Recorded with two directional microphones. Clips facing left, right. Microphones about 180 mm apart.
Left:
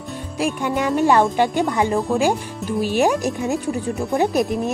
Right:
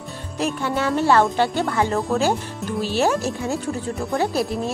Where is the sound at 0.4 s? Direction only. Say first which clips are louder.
Left 2 dB; 15° left (ahead or behind).